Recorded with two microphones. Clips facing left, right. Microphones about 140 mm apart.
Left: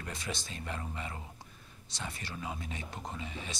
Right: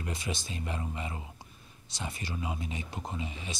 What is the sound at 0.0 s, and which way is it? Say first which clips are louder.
Speech: right 3 dB; 10° right (ahead or behind).